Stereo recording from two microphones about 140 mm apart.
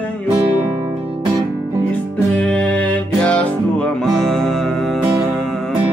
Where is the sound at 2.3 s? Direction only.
10° left (ahead or behind).